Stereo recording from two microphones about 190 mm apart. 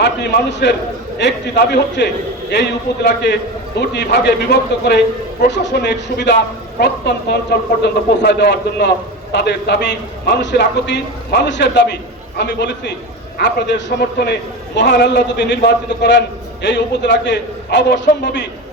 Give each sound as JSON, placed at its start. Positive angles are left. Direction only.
{"t": 0.0, "sound": "a man's voice", "side_deg": 65}